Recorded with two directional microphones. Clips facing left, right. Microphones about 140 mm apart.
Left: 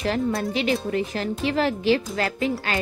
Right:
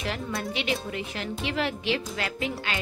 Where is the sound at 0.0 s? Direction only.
40° left (ahead or behind).